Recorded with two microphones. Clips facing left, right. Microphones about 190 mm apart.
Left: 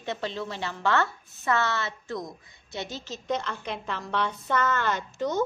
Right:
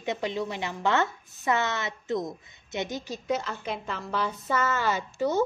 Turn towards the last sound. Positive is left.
turn(degrees=-10)  # may be behind; listen again after turning